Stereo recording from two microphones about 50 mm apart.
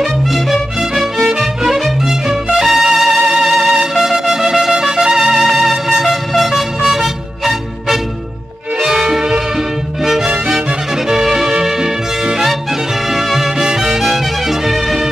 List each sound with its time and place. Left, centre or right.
0.0 s music: centre
11.1 s music: centre